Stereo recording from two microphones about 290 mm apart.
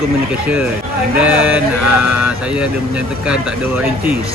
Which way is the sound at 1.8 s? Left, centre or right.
Right.